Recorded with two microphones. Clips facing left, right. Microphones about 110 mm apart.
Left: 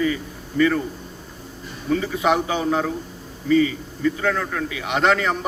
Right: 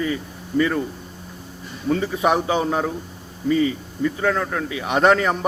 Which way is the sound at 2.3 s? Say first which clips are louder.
Even; 30° right (ahead or behind).